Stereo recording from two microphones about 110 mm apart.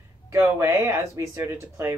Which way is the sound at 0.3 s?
25° right (ahead or behind).